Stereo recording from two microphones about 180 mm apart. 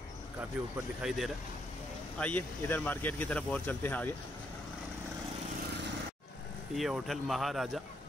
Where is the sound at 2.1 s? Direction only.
10° left (ahead or behind).